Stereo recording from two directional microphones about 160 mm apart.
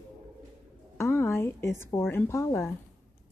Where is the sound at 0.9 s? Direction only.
15° left (ahead or behind).